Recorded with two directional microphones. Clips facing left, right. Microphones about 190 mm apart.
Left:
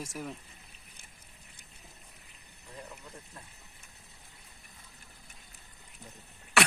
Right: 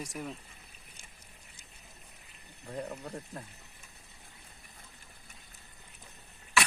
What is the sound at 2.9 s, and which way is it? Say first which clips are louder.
Speech: right 8 dB; 55° right (ahead or behind).